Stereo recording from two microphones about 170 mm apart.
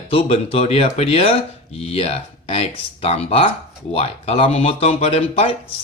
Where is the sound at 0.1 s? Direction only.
35° left (ahead or behind).